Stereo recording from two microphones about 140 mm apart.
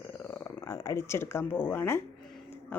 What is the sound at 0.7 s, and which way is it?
A woman's voice, 20° left (ahead or behind).